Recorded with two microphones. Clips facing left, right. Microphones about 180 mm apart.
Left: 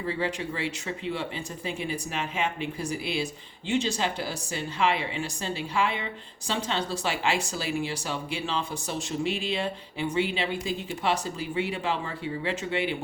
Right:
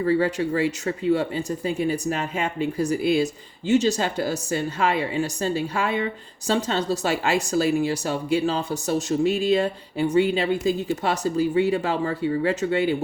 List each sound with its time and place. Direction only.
0.0 s speech: 40° right (ahead or behind)